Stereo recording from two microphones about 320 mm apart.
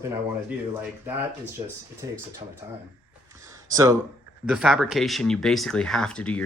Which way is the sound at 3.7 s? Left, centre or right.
Centre.